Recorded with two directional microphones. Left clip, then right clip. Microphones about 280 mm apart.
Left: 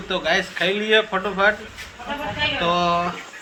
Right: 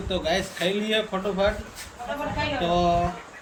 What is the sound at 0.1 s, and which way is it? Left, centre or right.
Speech, centre.